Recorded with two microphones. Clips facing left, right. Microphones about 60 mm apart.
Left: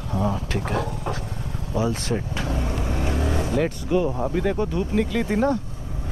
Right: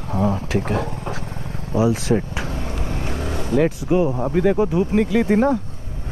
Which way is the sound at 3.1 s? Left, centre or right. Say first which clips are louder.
Left 2 dB; left.